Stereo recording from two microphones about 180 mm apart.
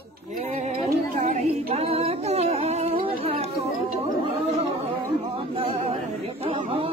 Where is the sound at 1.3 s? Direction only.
35° right (ahead or behind).